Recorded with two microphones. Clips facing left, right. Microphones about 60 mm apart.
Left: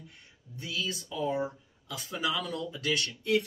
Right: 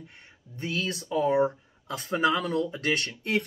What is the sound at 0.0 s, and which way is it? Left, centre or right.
Speech, right.